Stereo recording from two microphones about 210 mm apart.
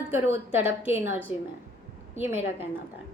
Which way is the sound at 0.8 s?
35° right (ahead or behind).